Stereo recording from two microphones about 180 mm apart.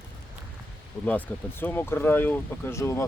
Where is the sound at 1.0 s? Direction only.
10° left (ahead or behind).